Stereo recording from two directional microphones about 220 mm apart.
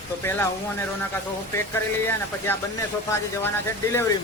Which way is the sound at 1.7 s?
10° left (ahead or behind).